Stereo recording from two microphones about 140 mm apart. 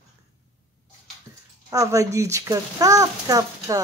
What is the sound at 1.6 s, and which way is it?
A child's voice, 25° right (ahead or behind).